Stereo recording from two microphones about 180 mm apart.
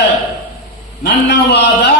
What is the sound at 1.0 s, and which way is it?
Speech, 75° left (ahead or behind).